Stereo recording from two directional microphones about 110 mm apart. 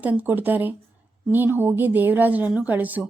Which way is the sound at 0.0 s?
15° right (ahead or behind).